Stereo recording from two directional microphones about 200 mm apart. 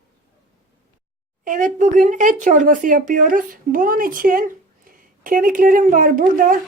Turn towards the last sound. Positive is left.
turn(degrees=-45)  # may be behind; listen again after turning